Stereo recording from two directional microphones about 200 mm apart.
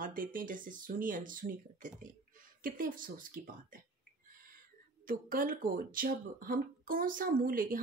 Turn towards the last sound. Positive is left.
turn(degrees=-45)  # may be behind; listen again after turning